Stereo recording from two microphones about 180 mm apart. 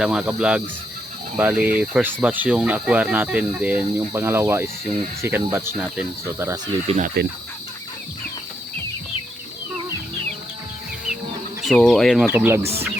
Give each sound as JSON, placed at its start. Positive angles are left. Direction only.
{"t": 0.0, "sound": "speech", "side_deg": -5}
{"t": 6.8, "sound": "speech", "side_deg": -45}
{"t": 11.6, "sound": "speech", "side_deg": 0}
{"t": 12.2, "sound": "speech", "side_deg": -10}